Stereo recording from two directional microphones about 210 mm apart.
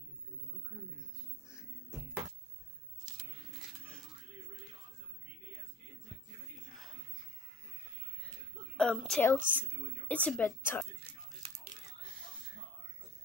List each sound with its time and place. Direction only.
8.7 s a woman's voice: centre (ahead or behind)